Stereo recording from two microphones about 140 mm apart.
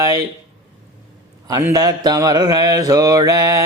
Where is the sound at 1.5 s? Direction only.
25° right (ahead or behind).